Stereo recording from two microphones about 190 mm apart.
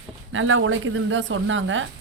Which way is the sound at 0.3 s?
90° right.